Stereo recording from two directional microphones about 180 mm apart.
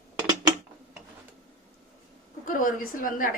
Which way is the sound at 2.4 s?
50° left (ahead or behind).